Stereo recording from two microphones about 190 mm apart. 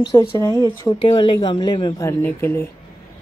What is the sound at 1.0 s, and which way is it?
Speech, 25° left (ahead or behind).